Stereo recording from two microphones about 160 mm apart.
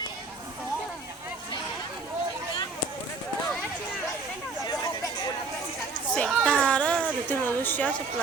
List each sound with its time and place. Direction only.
4.6 s chatter: 25° left (ahead or behind)
6.1 s children playing: 5° left (ahead or behind)
7.3 s a sound: 10° left (ahead or behind)